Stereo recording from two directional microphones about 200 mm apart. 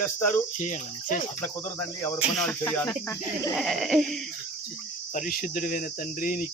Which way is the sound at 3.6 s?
Centre (ahead or behind).